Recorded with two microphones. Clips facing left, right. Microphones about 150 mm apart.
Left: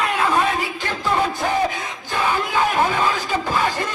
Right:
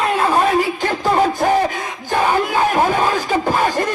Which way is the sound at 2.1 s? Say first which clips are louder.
Right 5 dB; 50° right (ahead or behind).